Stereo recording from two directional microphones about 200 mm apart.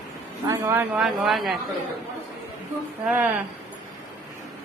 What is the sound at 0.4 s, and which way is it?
A man's voice, 10° right (ahead or behind).